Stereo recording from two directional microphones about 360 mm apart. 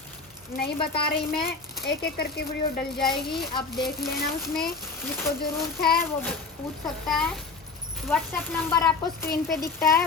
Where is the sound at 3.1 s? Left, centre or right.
Centre.